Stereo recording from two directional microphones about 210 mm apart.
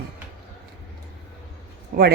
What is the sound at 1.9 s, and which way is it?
Speech, 45° right (ahead or behind).